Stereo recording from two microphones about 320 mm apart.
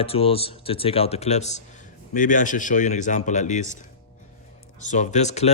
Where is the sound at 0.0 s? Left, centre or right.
Centre.